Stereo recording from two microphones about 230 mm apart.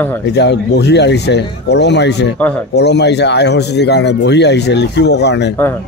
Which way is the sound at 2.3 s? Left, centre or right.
Centre.